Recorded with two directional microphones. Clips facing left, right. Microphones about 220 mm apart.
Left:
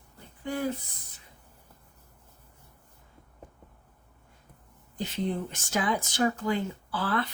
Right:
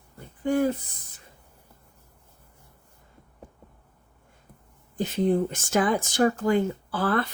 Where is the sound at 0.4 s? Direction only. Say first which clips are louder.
Right 8 dB; 50° right (ahead or behind).